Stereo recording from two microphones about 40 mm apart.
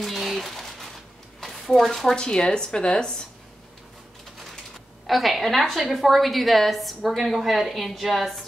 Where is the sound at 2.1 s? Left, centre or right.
Left.